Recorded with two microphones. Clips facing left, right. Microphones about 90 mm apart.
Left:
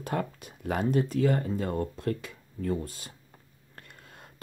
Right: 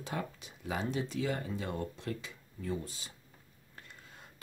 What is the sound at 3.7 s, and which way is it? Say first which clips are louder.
Whispering: left 3 dB; 55° left (ahead or behind).